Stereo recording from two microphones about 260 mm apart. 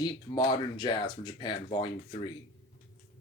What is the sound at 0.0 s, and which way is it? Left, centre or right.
Speech, centre.